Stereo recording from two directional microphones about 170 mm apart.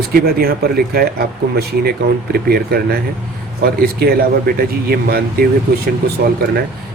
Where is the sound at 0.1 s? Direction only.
65° right (ahead or behind).